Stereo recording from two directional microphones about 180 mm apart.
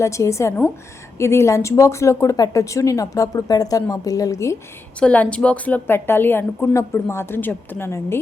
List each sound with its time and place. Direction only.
0.0 s speech: 15° left (ahead or behind)